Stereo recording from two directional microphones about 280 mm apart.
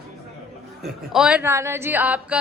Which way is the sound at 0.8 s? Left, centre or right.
Centre.